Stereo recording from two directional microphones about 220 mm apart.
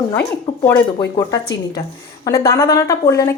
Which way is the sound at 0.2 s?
10° left (ahead or behind).